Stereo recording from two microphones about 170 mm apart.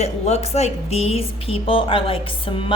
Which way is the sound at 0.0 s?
40° left (ahead or behind).